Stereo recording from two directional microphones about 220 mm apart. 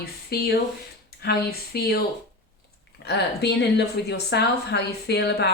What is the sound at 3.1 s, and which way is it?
A woman's voice, 50° left (ahead or behind).